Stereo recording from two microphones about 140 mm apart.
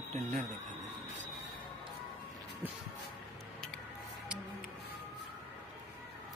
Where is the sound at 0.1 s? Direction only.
65° right (ahead or behind).